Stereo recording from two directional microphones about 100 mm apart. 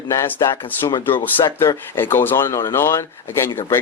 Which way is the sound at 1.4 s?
35° left (ahead or behind).